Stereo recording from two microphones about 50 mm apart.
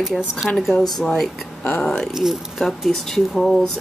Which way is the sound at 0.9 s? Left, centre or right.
Centre.